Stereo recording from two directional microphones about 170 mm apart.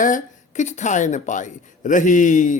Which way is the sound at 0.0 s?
50° left (ahead or behind).